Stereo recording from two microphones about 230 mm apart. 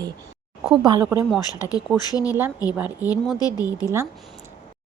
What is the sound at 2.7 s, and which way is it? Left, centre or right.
Speech, centre.